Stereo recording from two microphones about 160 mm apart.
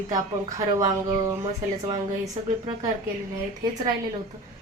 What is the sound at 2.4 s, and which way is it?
Speech, 40° right (ahead or behind).